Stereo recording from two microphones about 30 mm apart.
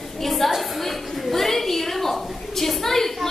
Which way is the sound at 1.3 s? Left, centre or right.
Centre.